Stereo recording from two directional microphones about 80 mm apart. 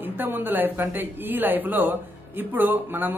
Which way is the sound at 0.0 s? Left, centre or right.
Right.